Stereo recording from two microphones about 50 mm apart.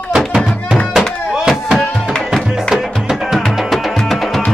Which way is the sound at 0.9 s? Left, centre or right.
Centre.